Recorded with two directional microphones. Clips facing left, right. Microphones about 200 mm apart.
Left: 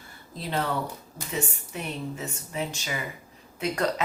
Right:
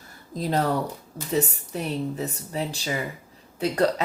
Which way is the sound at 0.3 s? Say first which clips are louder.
Right 5 dB; 40° right (ahead or behind).